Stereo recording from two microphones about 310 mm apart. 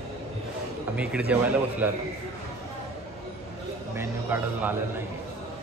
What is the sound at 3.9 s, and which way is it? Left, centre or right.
Speech, centre.